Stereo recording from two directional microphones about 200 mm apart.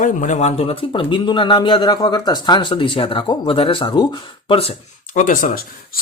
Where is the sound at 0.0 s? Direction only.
40° left (ahead or behind).